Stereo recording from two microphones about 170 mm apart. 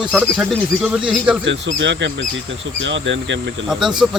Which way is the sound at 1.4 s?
90° right.